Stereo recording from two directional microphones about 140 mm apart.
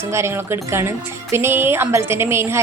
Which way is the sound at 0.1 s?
20° right (ahead or behind).